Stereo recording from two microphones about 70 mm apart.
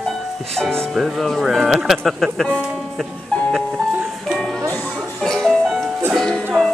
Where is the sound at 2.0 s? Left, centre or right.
Centre.